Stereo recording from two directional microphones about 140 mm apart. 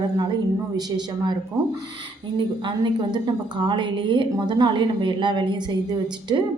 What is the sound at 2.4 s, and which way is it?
A woman's voice, 35° right (ahead or behind).